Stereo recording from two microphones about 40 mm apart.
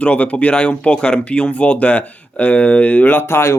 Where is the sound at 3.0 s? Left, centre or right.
Left.